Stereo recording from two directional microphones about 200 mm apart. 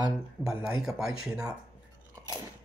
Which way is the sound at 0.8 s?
Centre (ahead or behind).